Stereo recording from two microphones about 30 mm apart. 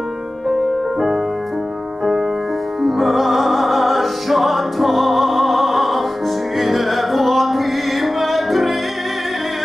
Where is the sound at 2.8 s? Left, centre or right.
Centre.